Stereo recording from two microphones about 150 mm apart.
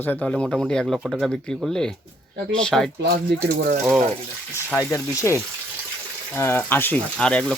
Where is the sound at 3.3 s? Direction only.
90° right.